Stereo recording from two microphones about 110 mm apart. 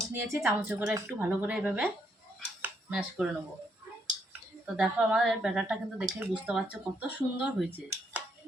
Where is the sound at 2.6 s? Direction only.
10° right (ahead or behind).